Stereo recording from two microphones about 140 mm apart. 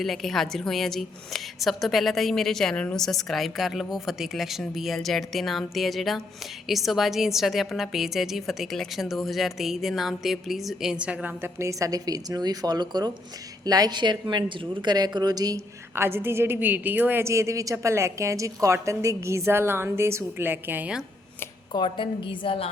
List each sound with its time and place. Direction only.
0.0 s a woman's voice: centre (ahead or behind)
21.7 s a woman's voice: 35° left (ahead or behind)